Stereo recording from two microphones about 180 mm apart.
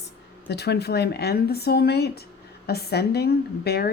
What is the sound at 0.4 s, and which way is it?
Speech, 65° left (ahead or behind).